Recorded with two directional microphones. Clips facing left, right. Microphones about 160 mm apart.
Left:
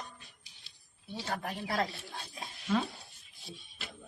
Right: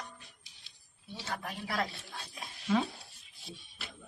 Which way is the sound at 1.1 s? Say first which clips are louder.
Left 3 dB; 35° left (ahead or behind).